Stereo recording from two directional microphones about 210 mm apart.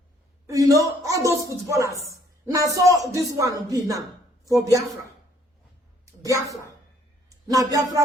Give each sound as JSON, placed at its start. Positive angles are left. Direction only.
{"t": 0.4, "sound": "speech", "side_deg": -15}
{"t": 6.1, "sound": "a woman's voice", "side_deg": -15}